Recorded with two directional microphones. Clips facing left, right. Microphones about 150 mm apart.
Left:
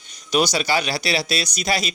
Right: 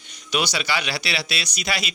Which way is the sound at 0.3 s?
40° left (ahead or behind).